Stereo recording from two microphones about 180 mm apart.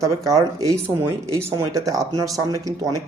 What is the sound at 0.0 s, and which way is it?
Speech, 20° right (ahead or behind).